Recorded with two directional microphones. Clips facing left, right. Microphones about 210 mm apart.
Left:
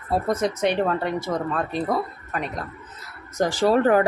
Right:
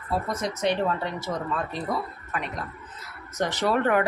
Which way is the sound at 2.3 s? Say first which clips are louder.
Left 3 dB; 40° left (ahead or behind).